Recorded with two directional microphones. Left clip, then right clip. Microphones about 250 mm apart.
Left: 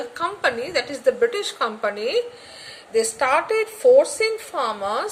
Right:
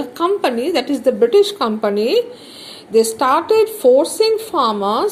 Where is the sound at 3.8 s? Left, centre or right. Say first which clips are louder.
Right 1 dB; centre.